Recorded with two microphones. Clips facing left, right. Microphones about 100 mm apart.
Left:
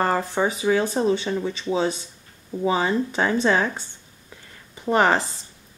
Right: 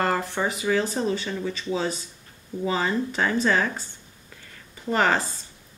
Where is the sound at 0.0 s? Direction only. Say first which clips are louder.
Left 3 dB; 20° left (ahead or behind).